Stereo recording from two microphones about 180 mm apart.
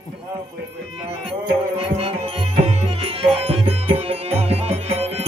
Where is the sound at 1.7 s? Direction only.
35° right (ahead or behind).